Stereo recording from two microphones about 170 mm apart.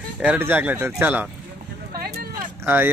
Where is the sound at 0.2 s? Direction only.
10° right (ahead or behind).